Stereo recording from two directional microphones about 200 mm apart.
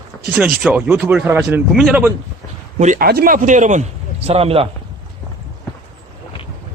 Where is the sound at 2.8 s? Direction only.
40° right (ahead or behind).